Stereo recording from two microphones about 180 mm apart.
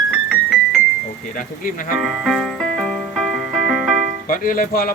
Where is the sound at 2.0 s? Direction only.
Centre (ahead or behind).